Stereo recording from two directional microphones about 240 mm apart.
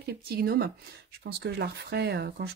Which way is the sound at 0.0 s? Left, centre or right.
Right.